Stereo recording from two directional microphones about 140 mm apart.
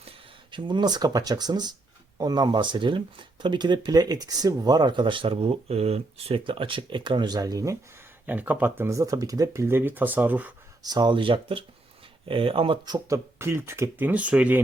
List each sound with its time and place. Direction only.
0.5 s speech: 35° right (ahead or behind)
8.3 s speech: 10° right (ahead or behind)
10.8 s speech: 30° right (ahead or behind)
13.4 s speech: 20° right (ahead or behind)